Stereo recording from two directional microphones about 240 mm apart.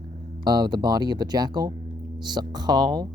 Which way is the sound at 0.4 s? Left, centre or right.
Centre.